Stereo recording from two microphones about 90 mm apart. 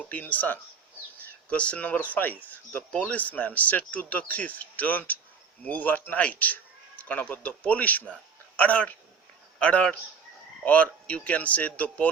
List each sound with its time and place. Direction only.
0.0 s a man's voice: 15° left (ahead or behind)